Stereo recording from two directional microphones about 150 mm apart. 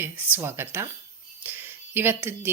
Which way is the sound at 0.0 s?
15° right (ahead or behind).